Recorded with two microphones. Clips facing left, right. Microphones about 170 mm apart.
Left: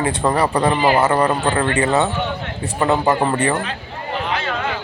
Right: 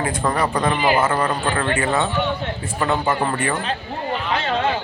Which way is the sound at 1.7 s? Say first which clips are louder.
Left 3 dB; 20° left (ahead or behind).